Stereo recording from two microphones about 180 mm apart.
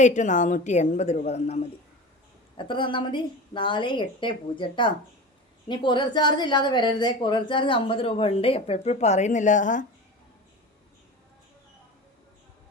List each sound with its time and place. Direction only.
0.0 s a woman's voice: 40° left (ahead or behind)